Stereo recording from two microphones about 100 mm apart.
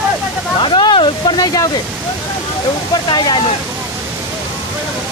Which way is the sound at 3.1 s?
50° left (ahead or behind).